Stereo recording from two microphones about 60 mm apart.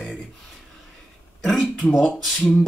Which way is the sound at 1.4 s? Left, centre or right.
Centre.